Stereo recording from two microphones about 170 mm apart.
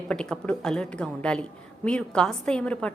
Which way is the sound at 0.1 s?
5° left (ahead or behind).